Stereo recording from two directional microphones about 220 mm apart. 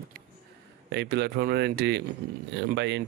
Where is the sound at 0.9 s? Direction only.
50° right (ahead or behind).